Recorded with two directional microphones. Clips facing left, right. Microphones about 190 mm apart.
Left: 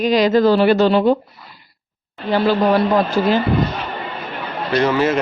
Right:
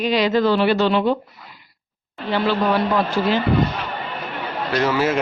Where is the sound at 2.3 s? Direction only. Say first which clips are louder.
Left 4 dB; 40° left (ahead or behind).